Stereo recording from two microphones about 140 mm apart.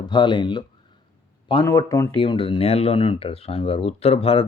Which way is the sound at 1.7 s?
20° left (ahead or behind).